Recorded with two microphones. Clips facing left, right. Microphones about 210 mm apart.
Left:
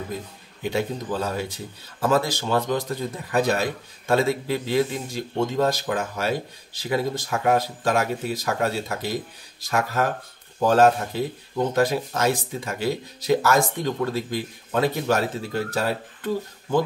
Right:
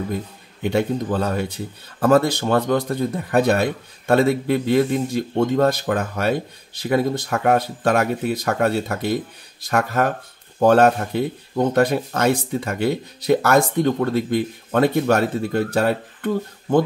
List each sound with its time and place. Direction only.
0.6 s speech: 60° right (ahead or behind)